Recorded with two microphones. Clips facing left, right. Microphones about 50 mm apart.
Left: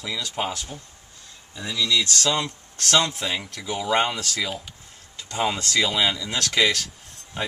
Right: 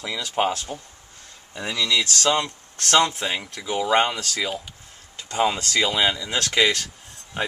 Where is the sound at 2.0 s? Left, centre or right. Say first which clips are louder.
Right 2 dB; right.